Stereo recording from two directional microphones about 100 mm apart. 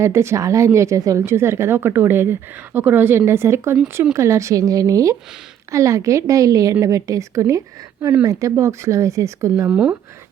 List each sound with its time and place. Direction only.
0.0 s speech: 25° right (ahead or behind)
9.6 s speech: 10° right (ahead or behind)